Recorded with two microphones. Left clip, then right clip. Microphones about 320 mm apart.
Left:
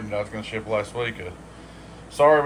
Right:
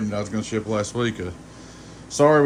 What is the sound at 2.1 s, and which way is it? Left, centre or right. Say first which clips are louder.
Speech: even; right.